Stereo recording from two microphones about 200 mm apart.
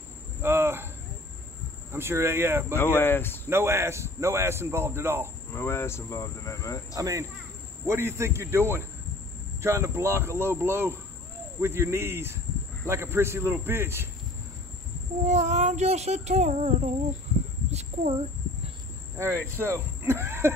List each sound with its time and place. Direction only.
0.4 s cricket: 10° right (ahead or behind)
1.9 s speech: 10° right (ahead or behind)
2.7 s speech: 10° left (ahead or behind)
3.4 s speech: 10° right (ahead or behind)
5.5 s speech: 15° left (ahead or behind)
7.0 s speech: 15° right (ahead or behind)
15.2 s a sound: 35° right (ahead or behind)
19.1 s speech: 10° right (ahead or behind)